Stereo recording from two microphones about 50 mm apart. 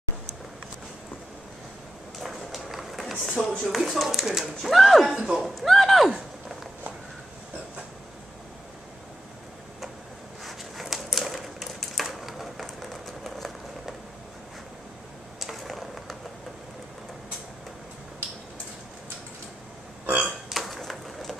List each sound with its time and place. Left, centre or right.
2.1 s run: centre
3.3 s speech: centre
3.6 s speech: centre
10.4 s typewriter: centre
15.4 s a sound: centre
20.1 s burping: right
20.4 s a sound: centre